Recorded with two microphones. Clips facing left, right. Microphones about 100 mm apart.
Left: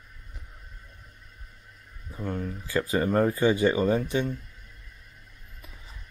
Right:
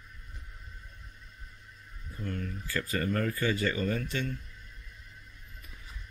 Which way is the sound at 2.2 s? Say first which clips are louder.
Left 5 dB; 20° left (ahead or behind).